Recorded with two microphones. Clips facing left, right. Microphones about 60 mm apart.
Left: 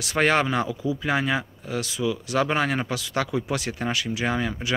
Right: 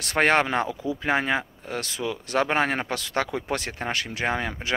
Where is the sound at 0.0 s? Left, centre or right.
Right.